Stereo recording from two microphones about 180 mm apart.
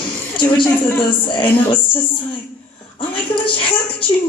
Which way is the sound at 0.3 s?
25° left (ahead or behind).